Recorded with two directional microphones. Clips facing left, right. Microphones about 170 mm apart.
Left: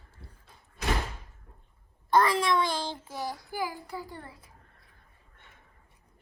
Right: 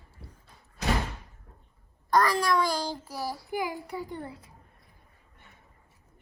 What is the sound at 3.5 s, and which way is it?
A child's voice, 20° right (ahead or behind).